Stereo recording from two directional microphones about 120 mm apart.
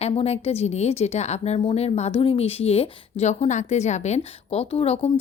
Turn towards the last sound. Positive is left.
turn(degrees=60)  # may be behind; listen again after turning